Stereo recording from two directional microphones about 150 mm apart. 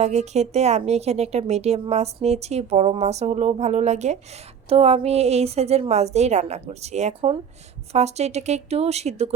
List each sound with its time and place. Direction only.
0.0 s a woman's voice: 50° right (ahead or behind)